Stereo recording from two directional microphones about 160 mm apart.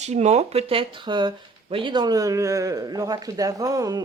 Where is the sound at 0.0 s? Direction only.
45° right (ahead or behind).